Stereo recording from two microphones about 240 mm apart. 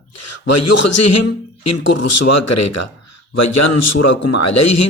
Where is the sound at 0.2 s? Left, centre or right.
Left.